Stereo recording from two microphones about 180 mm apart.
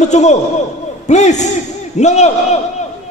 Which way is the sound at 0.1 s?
40° left (ahead or behind).